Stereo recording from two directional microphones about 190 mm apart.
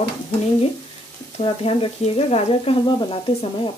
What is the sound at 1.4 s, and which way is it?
Speech, 30° left (ahead or behind).